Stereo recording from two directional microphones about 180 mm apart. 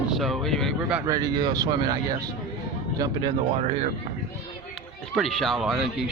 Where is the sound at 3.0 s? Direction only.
25° right (ahead or behind).